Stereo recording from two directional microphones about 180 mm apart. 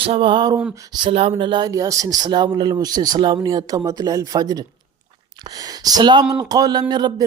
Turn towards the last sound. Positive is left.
turn(degrees=-25)  # may be behind; listen again after turning